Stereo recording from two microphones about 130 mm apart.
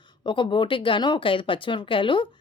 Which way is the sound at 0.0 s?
35° left (ahead or behind).